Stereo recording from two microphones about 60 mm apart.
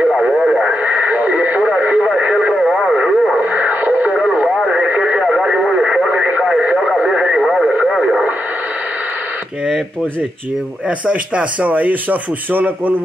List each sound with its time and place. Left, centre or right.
0.1 s radio: centre
0.8 s radio: right
2.5 s radio: centre
3.3 s radio: right
4.1 s radio: centre
11.1 s speech: right